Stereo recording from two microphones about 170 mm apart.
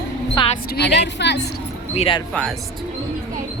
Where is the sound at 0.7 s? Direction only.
85° left.